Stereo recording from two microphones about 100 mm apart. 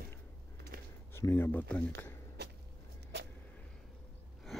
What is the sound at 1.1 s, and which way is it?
Speech, 25° left (ahead or behind).